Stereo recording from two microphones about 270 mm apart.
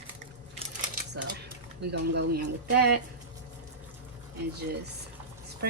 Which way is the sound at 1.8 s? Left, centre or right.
Right.